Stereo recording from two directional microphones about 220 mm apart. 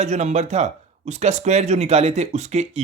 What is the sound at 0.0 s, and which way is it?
Speech, 30° right (ahead or behind).